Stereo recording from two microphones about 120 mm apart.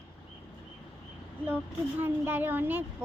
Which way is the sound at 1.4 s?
15° right (ahead or behind).